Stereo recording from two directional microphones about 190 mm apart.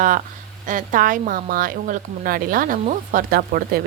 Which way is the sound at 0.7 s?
40° right (ahead or behind).